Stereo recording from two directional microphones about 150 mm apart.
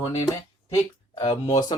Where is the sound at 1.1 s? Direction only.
30° left (ahead or behind).